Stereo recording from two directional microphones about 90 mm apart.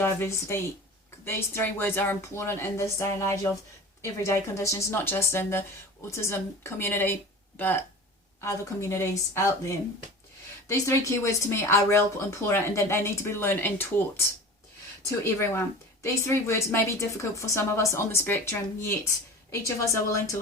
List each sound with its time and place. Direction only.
0.0 s speech: 30° left (ahead or behind)
8.4 s a woman's voice: 30° left (ahead or behind)
15.2 s a woman's voice: 30° left (ahead or behind)